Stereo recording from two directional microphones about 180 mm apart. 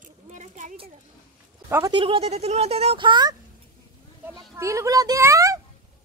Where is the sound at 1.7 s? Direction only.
20° right (ahead or behind).